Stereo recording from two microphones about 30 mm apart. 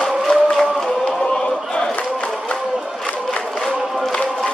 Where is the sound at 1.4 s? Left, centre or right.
Left.